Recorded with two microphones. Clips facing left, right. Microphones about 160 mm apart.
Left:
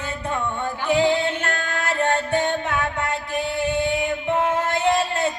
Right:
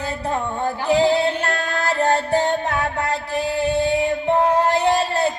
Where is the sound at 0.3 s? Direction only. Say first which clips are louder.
Right 3 dB; 35° right (ahead or behind).